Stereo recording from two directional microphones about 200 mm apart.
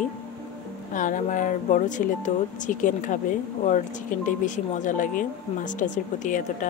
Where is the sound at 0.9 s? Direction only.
40° left (ahead or behind).